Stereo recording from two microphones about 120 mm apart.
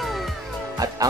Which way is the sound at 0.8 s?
30° right (ahead or behind).